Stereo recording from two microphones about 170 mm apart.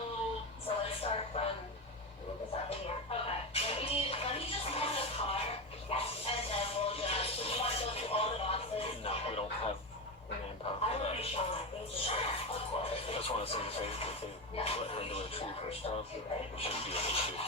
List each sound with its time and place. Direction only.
0.9 s a sound: 35° left (ahead or behind)
2.6 s music: 35° left (ahead or behind)
10.8 s music: 35° left (ahead or behind)
14.5 s television: 35° left (ahead or behind)
16.6 s rub: 35° left (ahead or behind)